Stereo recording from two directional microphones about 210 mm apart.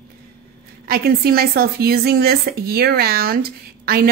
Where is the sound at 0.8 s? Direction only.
45° right (ahead or behind).